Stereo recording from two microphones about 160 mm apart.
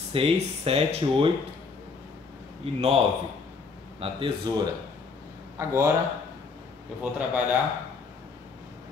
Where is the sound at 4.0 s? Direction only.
35° right (ahead or behind).